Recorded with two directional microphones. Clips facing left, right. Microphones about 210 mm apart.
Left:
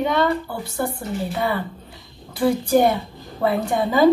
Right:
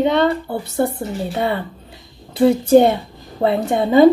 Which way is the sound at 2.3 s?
25° right (ahead or behind).